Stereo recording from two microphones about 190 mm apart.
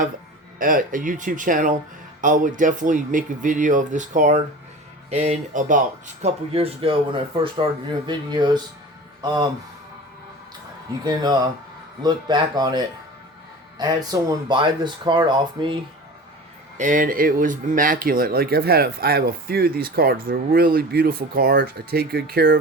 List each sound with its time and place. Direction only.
0.6 s speech: 45° right (ahead or behind)
6.2 s speech: 30° right (ahead or behind)
11.0 s speech: 20° right (ahead or behind)
16.7 s speech: 40° right (ahead or behind)